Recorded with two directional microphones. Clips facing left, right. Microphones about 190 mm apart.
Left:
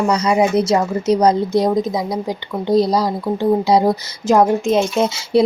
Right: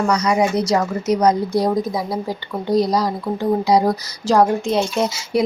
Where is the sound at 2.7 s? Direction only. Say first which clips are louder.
Left 2 dB; 30° left (ahead or behind).